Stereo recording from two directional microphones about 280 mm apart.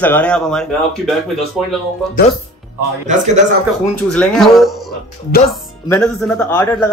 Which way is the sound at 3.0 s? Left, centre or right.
Right.